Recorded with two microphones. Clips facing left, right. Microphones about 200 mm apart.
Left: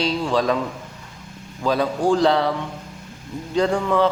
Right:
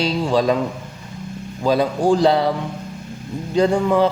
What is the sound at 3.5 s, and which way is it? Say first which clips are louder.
Speech: right 3 dB; 15° right (ahead or behind).